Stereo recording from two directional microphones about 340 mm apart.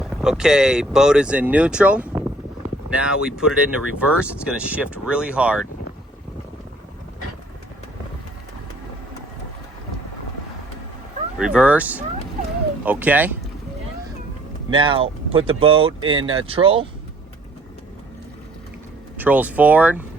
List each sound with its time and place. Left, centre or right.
0.0 s speech: centre
11.3 s speech: centre
14.7 s speech: centre
19.1 s speech: centre